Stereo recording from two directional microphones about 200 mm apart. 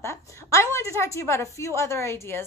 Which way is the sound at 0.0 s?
15° left (ahead or behind).